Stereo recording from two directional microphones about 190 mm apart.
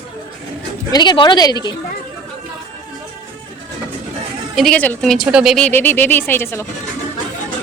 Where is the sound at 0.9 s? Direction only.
25° left (ahead or behind).